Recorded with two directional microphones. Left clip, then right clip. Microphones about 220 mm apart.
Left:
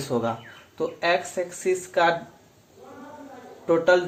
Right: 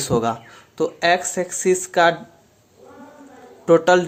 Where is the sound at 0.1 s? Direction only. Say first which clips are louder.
Right 5 dB; 40° right (ahead or behind).